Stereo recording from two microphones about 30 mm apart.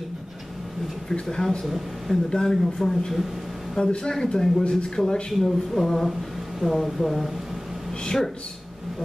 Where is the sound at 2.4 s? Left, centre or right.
Centre.